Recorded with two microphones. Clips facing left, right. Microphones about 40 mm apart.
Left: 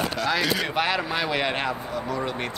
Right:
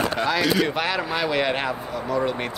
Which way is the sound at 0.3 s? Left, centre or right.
Centre.